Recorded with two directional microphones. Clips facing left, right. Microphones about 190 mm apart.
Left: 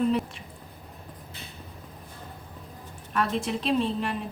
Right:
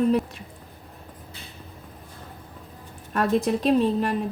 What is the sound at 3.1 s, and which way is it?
A woman's voice, 40° right (ahead or behind).